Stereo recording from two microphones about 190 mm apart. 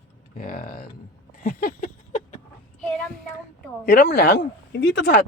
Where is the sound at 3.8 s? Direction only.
55° left (ahead or behind).